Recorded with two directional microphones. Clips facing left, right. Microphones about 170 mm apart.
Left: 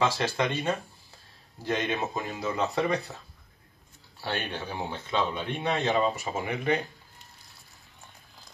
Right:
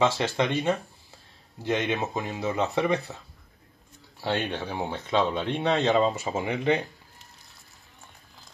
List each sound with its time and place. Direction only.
0.0 s speech: 20° right (ahead or behind)
4.2 s speech: 20° right (ahead or behind)